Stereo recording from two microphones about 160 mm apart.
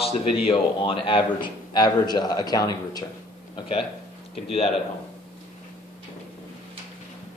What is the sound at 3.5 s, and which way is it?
Speech, 35° left (ahead or behind).